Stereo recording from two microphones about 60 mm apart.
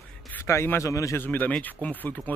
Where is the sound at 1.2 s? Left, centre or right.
Left.